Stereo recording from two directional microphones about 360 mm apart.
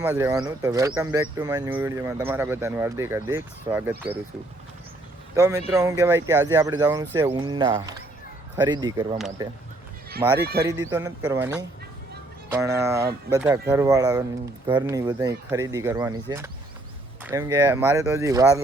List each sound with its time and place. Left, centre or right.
0.0 s speech: centre
5.7 s speech: centre
9.1 s speech: centre
10.1 s speech: right
10.6 s speech: centre